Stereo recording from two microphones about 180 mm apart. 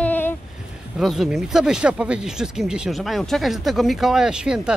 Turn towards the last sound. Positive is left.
turn(degrees=-5)  # may be behind; listen again after turning